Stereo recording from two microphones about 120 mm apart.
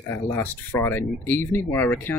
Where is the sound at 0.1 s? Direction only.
15° left (ahead or behind).